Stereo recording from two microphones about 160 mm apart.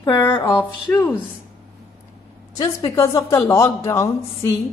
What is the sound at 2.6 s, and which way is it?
A woman's voice, 20° left (ahead or behind).